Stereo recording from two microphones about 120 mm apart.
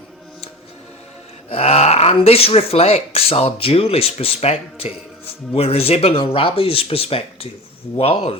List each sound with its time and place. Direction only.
1.5 s speech: 55° left (ahead or behind)